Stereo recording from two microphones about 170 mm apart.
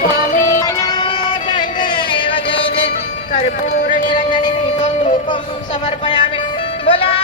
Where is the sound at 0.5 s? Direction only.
20° left (ahead or behind); by 3.5 s 40° left (ahead or behind).